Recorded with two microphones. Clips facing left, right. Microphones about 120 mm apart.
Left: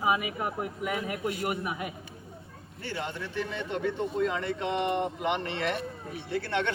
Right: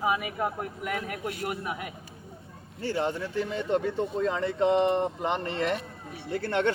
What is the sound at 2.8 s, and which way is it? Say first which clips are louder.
Speech: right 7 dB; 35° right (ahead or behind).